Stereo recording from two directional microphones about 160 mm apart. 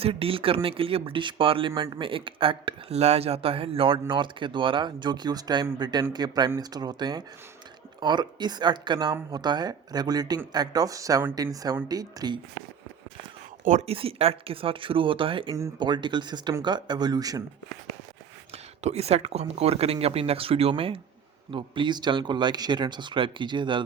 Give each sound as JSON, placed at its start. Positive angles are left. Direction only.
{"t": 0.0, "sound": "speech", "side_deg": -35}
{"t": 13.7, "sound": "speech", "side_deg": -45}
{"t": 18.5, "sound": "speech", "side_deg": -40}